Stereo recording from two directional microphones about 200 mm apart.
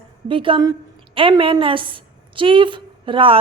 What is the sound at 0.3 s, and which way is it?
A woman's voice, 25° right (ahead or behind).